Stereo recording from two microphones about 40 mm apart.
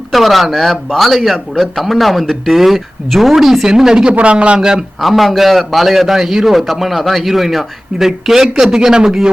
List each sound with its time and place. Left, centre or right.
0.1 s a man's voice: centre
4.2 s a man's voice: right
4.9 s a man's voice: centre